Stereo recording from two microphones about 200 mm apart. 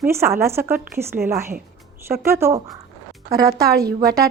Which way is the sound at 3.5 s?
50° right (ahead or behind).